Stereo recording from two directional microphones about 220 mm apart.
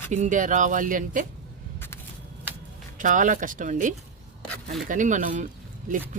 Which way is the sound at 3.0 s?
35° right (ahead or behind).